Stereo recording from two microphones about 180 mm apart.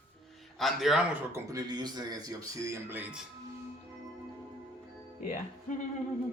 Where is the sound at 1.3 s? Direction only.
20° right (ahead or behind).